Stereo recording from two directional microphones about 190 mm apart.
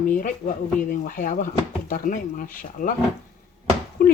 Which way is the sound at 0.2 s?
45° left (ahead or behind).